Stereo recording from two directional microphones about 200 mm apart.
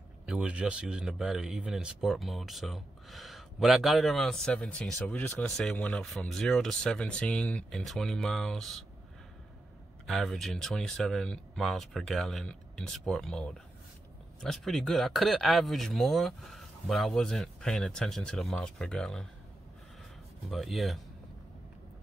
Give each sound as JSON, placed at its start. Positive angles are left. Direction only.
{"t": 0.3, "sound": "speech", "side_deg": -5}
{"t": 10.0, "sound": "speech", "side_deg": 0}
{"t": 20.4, "sound": "speech", "side_deg": 0}